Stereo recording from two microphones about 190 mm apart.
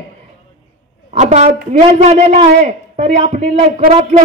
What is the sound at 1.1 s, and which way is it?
A man's voice, 35° right (ahead or behind).